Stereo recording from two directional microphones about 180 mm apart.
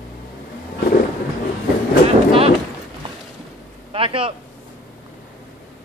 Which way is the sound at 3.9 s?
30° right (ahead or behind).